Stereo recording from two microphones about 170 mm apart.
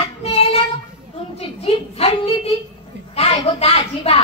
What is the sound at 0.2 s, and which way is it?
Child singing, 35° left (ahead or behind).